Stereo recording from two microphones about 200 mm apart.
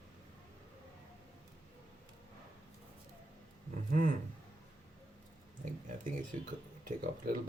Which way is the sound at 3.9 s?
45° right (ahead or behind).